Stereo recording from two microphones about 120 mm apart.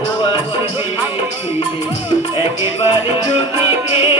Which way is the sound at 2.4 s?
45° left (ahead or behind).